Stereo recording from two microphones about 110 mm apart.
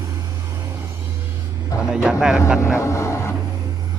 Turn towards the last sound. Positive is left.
turn(degrees=25)  # may be behind; listen again after turning